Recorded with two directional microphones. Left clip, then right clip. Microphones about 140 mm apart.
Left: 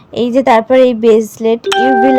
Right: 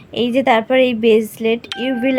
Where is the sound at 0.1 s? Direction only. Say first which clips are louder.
Left 5 dB; 35° left (ahead or behind).